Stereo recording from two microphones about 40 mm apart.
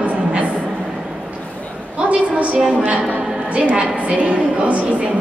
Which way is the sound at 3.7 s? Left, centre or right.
Right.